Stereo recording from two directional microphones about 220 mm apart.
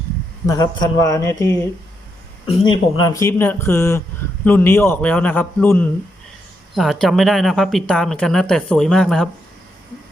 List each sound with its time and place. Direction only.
0.4 s a man's voice: 15° left (ahead or behind)
2.6 s a man's voice: 20° left (ahead or behind); by 9.3 s 5° left (ahead or behind)